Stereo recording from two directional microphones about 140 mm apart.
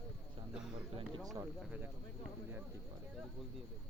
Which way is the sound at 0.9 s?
30° right (ahead or behind).